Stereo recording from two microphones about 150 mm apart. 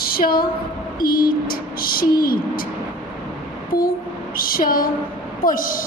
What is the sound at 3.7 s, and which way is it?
Speech, 75° left (ahead or behind).